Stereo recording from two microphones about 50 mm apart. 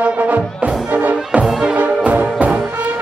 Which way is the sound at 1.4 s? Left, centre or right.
Centre.